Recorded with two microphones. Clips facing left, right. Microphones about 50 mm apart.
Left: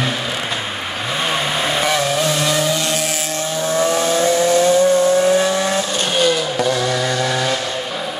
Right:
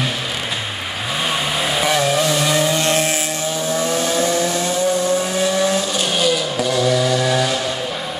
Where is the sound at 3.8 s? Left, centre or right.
Centre.